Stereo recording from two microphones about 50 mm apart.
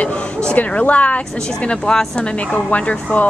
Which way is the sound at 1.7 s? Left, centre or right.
Centre.